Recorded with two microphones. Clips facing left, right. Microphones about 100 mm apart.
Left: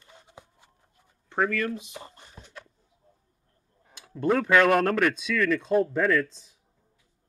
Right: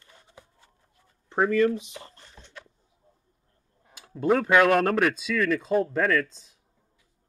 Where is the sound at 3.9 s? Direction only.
5° right (ahead or behind).